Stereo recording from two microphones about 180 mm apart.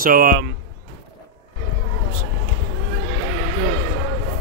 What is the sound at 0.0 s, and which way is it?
Speech, 50° right (ahead or behind).